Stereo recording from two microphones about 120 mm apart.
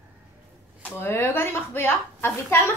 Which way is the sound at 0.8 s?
20° left (ahead or behind).